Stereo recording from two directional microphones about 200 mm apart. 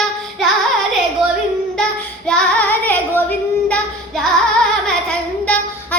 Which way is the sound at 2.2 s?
5° left (ahead or behind).